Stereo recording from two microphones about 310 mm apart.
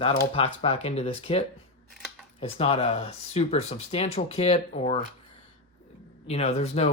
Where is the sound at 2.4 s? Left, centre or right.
Centre.